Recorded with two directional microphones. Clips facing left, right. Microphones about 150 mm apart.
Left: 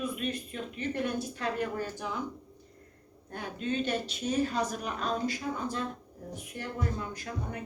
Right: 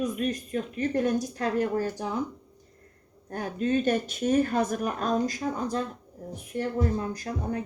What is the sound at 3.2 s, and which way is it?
A woman's voice, 45° right (ahead or behind).